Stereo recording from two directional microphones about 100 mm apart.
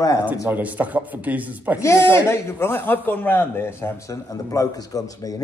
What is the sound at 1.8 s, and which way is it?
A man's voice, 25° left (ahead or behind).